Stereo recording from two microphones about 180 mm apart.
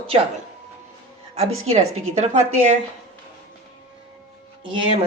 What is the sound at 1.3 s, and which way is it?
A woman's voice, 35° right (ahead or behind).